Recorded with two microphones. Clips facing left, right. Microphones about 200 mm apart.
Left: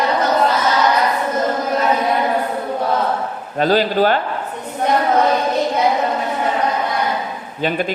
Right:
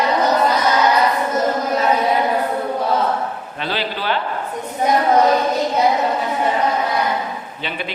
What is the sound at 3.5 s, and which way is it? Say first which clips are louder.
Speech: left 12 dB; 45° left (ahead or behind).